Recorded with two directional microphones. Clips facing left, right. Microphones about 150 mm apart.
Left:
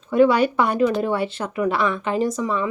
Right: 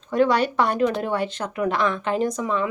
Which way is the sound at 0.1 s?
10° left (ahead or behind).